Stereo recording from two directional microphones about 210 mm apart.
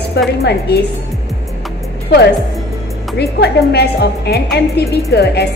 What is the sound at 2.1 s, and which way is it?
Speech, 55° left (ahead or behind).